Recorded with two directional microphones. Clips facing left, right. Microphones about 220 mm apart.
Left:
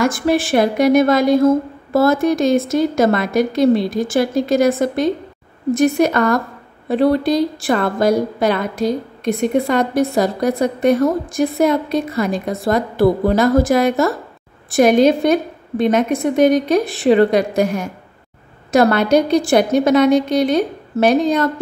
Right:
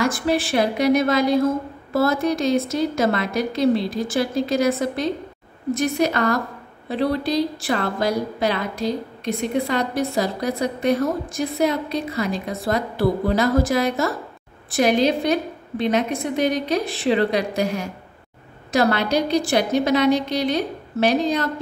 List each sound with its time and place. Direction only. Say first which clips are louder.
0.0 s a woman's voice: left 5 dB; 45° left (ahead or behind)